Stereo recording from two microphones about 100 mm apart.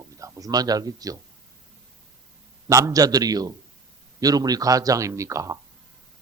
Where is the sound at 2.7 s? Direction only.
35° right (ahead or behind).